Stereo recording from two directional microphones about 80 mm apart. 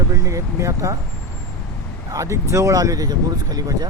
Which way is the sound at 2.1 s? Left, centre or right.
Right.